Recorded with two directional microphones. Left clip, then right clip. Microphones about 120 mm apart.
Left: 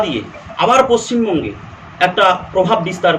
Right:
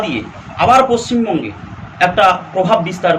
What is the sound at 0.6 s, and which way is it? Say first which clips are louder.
A man's voice: right 1 dB; 25° left (ahead or behind).